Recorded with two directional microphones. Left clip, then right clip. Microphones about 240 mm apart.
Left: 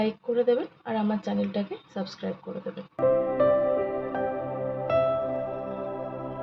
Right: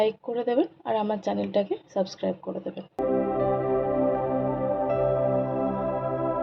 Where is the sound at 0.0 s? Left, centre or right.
Right.